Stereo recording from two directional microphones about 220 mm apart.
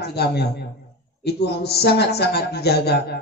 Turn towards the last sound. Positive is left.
turn(degrees=50)  # may be behind; listen again after turning